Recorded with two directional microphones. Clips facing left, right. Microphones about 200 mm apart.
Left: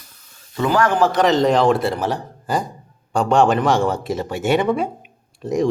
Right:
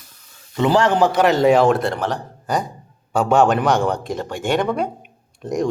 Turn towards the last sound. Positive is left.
turn(degrees=0)  # may be behind; listen again after turning